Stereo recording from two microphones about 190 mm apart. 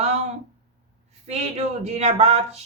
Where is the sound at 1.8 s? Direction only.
35° right (ahead or behind).